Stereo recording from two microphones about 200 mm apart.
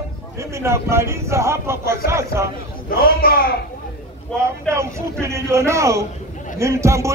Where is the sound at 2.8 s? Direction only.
50° left (ahead or behind).